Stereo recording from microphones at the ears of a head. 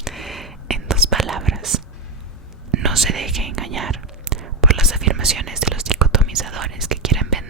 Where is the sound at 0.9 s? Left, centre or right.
Right.